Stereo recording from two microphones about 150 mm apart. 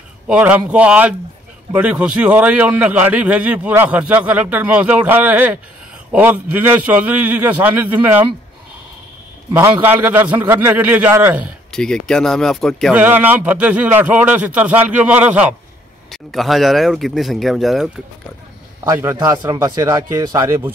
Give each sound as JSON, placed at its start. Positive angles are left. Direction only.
{"t": 0.3, "sound": "a man's voice", "side_deg": -10}
{"t": 9.5, "sound": "a man's voice", "side_deg": -15}
{"t": 11.7, "sound": "speech", "side_deg": 5}
{"t": 12.9, "sound": "a man's voice", "side_deg": -10}
{"t": 19.1, "sound": "speech", "side_deg": -30}